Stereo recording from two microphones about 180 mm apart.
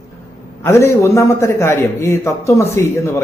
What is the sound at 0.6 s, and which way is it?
A man's voice, 15° left (ahead or behind).